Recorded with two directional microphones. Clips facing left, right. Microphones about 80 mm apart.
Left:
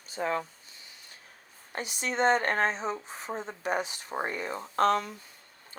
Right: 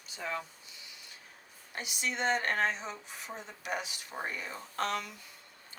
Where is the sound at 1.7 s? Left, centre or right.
Left.